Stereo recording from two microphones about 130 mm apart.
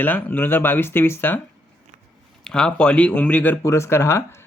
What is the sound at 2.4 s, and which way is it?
Speech, 5° left (ahead or behind).